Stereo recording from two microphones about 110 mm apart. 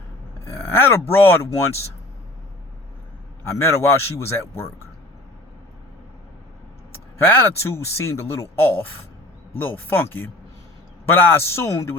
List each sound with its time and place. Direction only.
0.4 s speech: 25° left (ahead or behind)
3.7 s speech: 25° left (ahead or behind)
7.3 s speech: 20° left (ahead or behind)